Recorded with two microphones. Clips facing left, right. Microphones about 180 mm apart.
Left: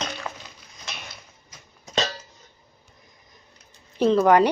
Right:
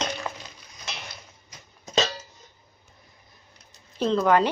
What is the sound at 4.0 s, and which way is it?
Speech, 10° left (ahead or behind).